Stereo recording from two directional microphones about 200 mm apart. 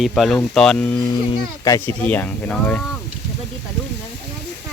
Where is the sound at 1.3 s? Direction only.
15° left (ahead or behind).